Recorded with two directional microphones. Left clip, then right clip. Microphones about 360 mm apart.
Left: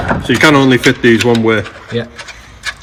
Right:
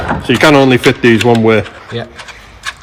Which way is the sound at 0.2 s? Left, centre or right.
Right.